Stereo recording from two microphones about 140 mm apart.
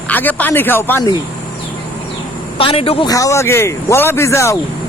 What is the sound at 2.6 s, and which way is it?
Speech, 40° left (ahead or behind).